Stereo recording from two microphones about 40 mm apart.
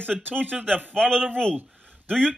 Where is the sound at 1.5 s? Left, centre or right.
Right.